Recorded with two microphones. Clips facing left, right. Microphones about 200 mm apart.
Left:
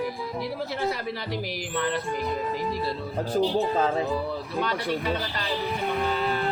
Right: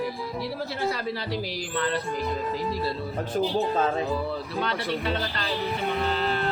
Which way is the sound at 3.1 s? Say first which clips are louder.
Left 3 dB; 35° left (ahead or behind).